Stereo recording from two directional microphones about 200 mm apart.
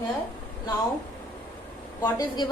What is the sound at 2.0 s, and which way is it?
Speech, 20° left (ahead or behind).